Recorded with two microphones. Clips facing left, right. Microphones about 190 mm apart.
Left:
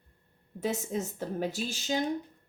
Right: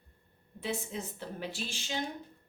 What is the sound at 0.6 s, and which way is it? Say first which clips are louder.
A woman's voice: left 5 dB; 45° left (ahead or behind).